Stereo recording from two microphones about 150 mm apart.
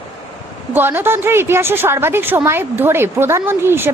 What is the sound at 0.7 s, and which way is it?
A woman's voice, 15° right (ahead or behind).